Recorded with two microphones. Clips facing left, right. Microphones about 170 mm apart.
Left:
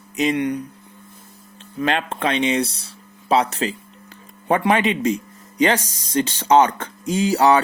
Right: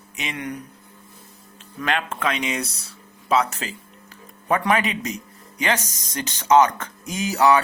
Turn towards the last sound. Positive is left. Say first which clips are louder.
# left 3 dB
turn(degrees=30)  # may be behind; listen again after turning